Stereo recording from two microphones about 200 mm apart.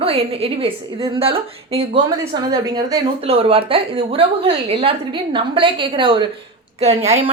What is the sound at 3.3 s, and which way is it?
A woman's voice, 30° right (ahead or behind).